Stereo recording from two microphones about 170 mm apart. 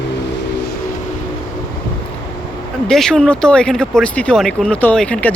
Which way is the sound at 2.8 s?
5° left (ahead or behind).